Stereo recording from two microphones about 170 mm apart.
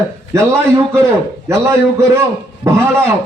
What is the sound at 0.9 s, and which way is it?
A man's voice, 15° right (ahead or behind).